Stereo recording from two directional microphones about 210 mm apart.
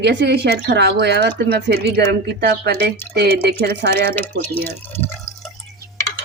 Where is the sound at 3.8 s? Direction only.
50° right (ahead or behind).